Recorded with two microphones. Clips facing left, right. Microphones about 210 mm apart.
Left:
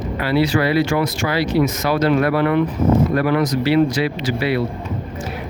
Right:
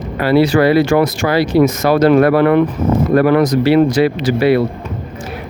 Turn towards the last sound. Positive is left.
turn(degrees=-50)  # may be behind; listen again after turning